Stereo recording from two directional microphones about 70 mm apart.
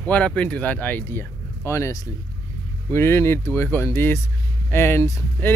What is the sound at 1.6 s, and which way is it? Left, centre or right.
A man's voice, left.